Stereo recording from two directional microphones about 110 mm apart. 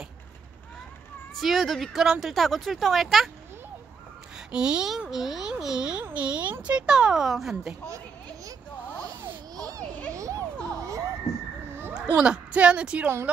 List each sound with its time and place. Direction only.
1.3 s speech: centre (ahead or behind)
4.5 s speech: 10° right (ahead or behind)
9.6 s a sound: 35° right (ahead or behind)
12.2 s speech: 10° right (ahead or behind)